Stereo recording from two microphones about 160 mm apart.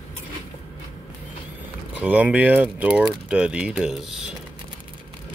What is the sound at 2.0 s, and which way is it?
Speech, 10° right (ahead or behind).